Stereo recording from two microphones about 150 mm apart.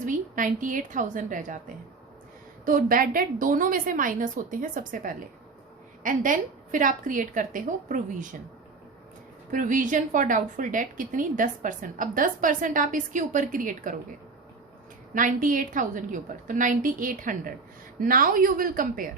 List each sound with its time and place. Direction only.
0.0 s a woman's voice: 60° right (ahead or behind)
2.6 s a woman's voice: 65° right (ahead or behind)
9.5 s a woman's voice: 60° right (ahead or behind)
15.1 s a woman's voice: 60° right (ahead or behind)